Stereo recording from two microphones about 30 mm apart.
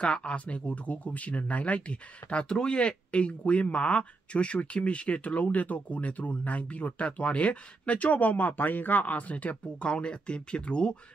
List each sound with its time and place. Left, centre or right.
0.0 s speech: left
2.5 s speech: left
3.1 s speech: left
9.8 s speech: left